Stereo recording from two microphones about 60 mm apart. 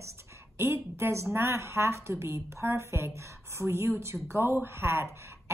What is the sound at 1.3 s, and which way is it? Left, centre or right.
A woman's voice, right.